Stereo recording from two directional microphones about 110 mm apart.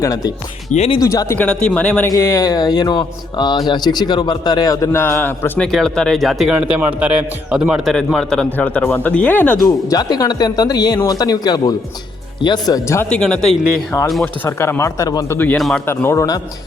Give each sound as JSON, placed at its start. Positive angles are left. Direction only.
{"t": 0.0, "sound": "speech", "side_deg": 35}
{"t": 0.7, "sound": "speech", "side_deg": 90}
{"t": 1.0, "sound": "speech", "side_deg": 30}
{"t": 1.4, "sound": "speech", "side_deg": 10}
{"t": 2.1, "sound": "speech", "side_deg": 30}
{"t": 5.5, "sound": "speech", "side_deg": 5}
{"t": 7.9, "sound": "speech", "side_deg": 5}
{"t": 9.6, "sound": "speech", "side_deg": 35}
{"t": 13.1, "sound": "speech", "side_deg": 10}
{"t": 13.9, "sound": "speech", "side_deg": 25}
{"t": 15.5, "sound": "speech", "side_deg": 0}
{"t": 15.9, "sound": "speech", "side_deg": 20}